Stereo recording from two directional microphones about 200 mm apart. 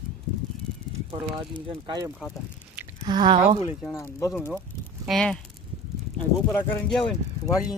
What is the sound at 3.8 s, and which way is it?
Speech, 15° left (ahead or behind).